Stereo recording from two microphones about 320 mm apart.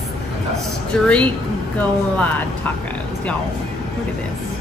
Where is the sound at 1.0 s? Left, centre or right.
Centre.